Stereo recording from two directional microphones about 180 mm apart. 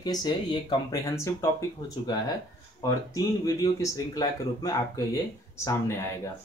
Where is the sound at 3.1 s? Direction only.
20° left (ahead or behind).